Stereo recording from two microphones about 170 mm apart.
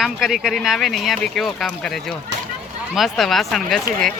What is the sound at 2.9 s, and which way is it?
Speech, centre (ahead or behind).